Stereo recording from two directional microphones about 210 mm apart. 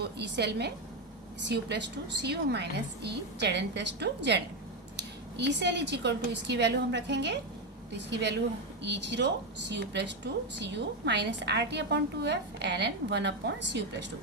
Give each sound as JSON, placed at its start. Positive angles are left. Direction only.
{"t": 0.2, "sound": "a woman's voice", "side_deg": -55}